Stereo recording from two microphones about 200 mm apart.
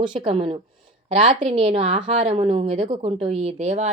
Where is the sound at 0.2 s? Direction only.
30° right (ahead or behind).